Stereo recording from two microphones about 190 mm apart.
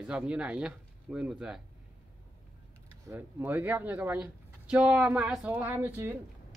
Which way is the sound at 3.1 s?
10° right (ahead or behind).